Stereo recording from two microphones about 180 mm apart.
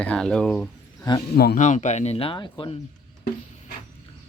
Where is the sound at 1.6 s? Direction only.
40° left (ahead or behind).